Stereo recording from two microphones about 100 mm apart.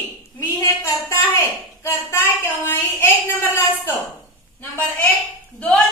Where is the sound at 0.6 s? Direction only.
35° left (ahead or behind).